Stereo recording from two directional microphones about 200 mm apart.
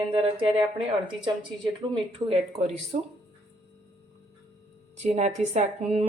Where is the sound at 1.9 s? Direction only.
30° right (ahead or behind).